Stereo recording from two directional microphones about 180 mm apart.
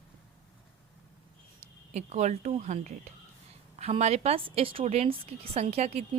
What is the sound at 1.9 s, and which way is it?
A woman's voice, 40° right (ahead or behind).